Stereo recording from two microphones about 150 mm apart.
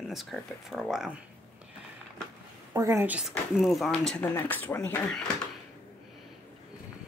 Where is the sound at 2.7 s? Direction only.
20° right (ahead or behind); by 5.0 s 15° left (ahead or behind).